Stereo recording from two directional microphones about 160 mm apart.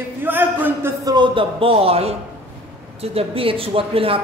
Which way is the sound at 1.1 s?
30° right (ahead or behind).